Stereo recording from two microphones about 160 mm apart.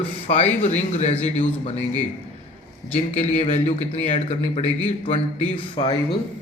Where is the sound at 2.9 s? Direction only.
45° left (ahead or behind).